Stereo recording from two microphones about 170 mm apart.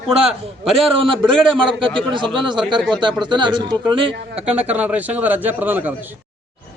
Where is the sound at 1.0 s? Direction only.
30° right (ahead or behind).